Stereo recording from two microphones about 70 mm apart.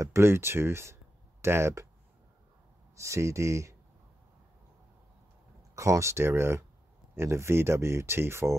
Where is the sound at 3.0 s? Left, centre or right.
Right.